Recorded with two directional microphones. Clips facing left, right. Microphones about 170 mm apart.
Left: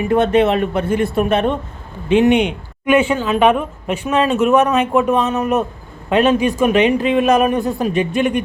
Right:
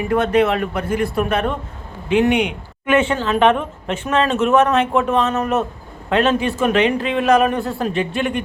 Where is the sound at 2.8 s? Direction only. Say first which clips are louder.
Left 2 dB; 10° left (ahead or behind).